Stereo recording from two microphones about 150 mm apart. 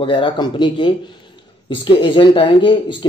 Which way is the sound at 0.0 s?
35° left (ahead or behind).